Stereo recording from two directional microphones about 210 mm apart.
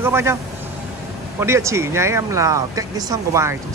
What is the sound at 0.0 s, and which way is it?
Speech, 10° right (ahead or behind).